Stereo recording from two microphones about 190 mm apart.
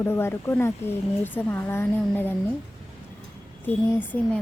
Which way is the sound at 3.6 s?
10° left (ahead or behind).